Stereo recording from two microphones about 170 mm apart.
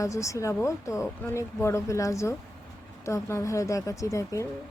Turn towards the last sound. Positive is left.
turn(degrees=20)  # may be behind; listen again after turning